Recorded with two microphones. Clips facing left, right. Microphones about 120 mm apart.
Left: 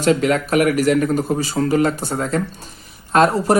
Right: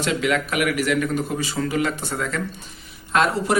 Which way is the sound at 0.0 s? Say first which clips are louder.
Left 6 dB; 40° left (ahead or behind).